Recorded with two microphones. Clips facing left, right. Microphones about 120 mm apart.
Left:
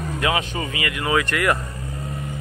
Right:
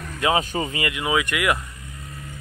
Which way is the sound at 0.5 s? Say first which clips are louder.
Right 1 dB; 25° right (ahead or behind).